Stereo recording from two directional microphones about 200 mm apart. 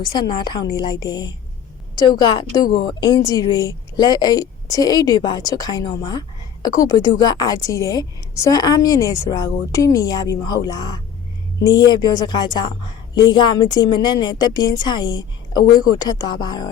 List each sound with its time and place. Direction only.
0.2 s a woman's voice: 20° left (ahead or behind)